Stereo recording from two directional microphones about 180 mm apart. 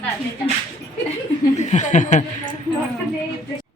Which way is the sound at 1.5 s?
40° left (ahead or behind).